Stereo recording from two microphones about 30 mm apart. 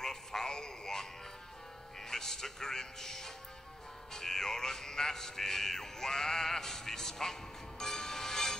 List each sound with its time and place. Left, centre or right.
0.0 s a sound: centre
2.0 s speech: centre
7.8 s music: centre